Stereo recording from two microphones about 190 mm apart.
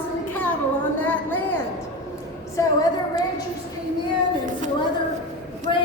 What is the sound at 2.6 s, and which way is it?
Speech, 20° left (ahead or behind).